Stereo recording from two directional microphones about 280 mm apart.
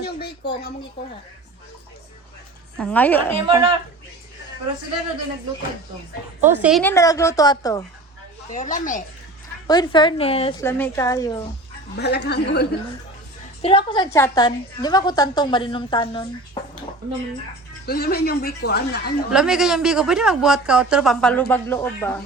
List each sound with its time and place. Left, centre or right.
0.0 s a sound: left
2.7 s a man's voice: centre
3.3 s speech: centre
6.4 s a woman's voice: centre
8.5 s speech: left
9.6 s a woman's voice: centre
10.6 s a woman's voice: centre
11.9 s speech: left
13.6 s a woman's voice: centre
17.8 s speech: left
19.3 s a man's voice: centre